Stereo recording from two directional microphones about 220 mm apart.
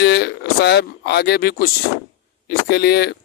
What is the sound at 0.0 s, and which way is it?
Speech, 50° left (ahead or behind).